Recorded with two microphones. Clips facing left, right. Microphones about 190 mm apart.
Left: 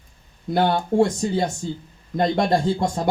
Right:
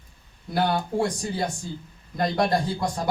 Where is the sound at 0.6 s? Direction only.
25° left (ahead or behind).